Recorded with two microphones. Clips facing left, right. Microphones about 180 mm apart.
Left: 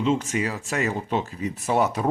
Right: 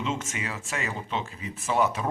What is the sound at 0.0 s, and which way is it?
Speech, 35° left (ahead or behind).